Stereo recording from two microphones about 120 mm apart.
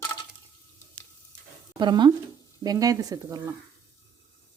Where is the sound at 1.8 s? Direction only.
40° right (ahead or behind).